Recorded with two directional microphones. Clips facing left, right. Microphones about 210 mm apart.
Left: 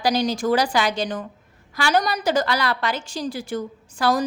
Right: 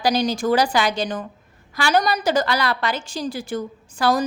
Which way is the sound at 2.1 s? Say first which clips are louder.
Right 1 dB; 40° right (ahead or behind).